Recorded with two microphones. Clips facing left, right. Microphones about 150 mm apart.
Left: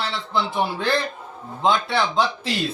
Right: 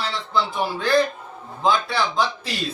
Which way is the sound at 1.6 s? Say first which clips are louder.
Left 1 dB; 25° left (ahead or behind).